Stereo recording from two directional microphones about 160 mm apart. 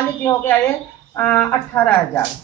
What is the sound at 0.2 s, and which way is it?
Speech, 20° left (ahead or behind).